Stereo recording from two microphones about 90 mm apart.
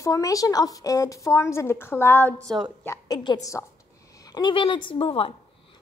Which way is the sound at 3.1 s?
60° left (ahead or behind).